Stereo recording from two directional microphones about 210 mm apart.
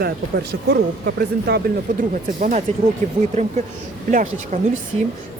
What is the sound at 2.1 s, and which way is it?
Speech, 35° right (ahead or behind).